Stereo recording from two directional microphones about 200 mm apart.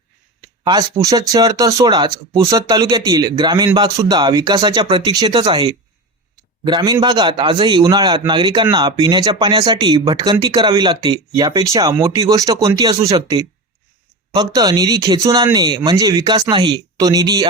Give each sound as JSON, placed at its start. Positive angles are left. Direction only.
{"t": 0.6, "sound": "speech", "side_deg": -15}